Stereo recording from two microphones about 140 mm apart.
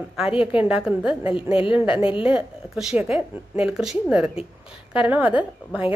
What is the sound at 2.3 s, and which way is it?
A woman's voice, 10° right (ahead or behind).